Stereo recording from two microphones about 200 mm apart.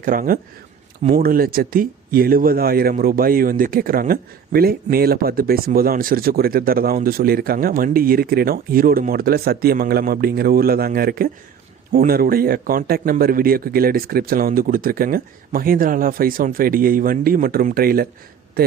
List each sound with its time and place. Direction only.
0.0 s speech: 45° right (ahead or behind)